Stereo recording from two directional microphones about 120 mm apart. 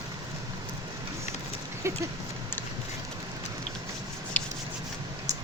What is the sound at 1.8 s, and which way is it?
Speech, 20° right (ahead or behind).